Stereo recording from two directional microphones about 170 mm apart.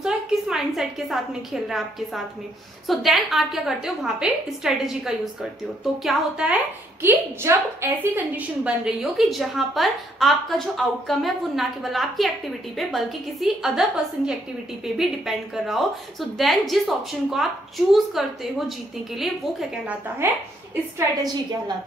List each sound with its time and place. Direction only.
0.0 s a woman's voice: centre (ahead or behind)
21.2 s a woman's voice: 25° right (ahead or behind)